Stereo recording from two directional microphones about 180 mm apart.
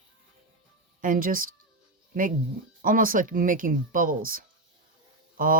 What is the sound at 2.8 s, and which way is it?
Speech, 50° right (ahead or behind).